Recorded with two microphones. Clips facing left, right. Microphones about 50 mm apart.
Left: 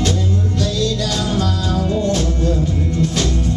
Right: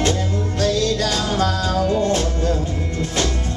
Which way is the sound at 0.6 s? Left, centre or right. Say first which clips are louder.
Right 4 dB; right.